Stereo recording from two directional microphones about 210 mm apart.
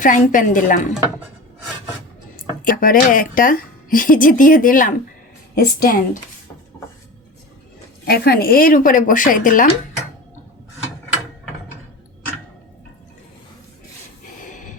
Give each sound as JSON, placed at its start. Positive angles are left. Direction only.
{"t": 0.0, "sound": "a woman's voice", "side_deg": 40}
{"t": 2.3, "sound": "a woman's voice", "side_deg": 40}
{"t": 8.0, "sound": "a woman's voice", "side_deg": 50}
{"t": 14.4, "sound": "a sound", "side_deg": 35}